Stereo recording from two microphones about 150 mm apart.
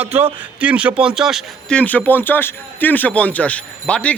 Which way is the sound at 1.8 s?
10° left (ahead or behind).